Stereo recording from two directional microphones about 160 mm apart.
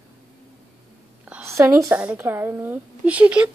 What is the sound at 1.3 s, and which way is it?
A woman's voice, 15° right (ahead or behind).